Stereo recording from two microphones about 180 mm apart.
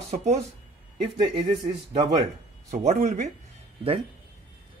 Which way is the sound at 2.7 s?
40° right (ahead or behind).